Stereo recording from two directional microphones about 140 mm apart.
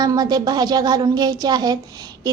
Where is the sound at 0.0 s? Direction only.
30° right (ahead or behind).